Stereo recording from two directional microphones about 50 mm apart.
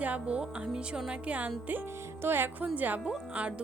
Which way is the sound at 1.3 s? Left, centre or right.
Right.